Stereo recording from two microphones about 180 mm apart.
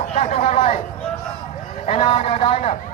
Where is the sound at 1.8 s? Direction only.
30° left (ahead or behind).